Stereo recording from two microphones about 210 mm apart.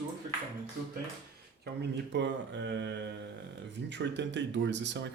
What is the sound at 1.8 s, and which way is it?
Speech, 55° right (ahead or behind).